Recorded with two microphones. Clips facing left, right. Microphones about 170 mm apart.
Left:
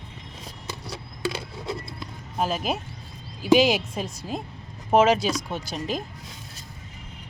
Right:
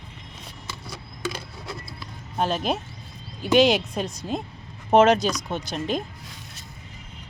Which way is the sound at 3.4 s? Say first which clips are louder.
Even; 5° left (ahead or behind).